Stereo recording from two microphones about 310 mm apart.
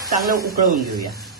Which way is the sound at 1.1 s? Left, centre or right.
Centre.